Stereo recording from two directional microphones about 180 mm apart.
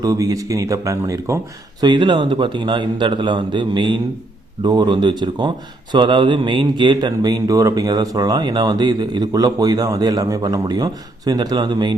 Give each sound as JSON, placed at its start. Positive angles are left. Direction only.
{"t": 0.0, "sound": "speech", "side_deg": -20}